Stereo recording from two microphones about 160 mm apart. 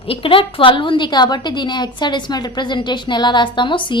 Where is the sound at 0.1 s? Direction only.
35° left (ahead or behind).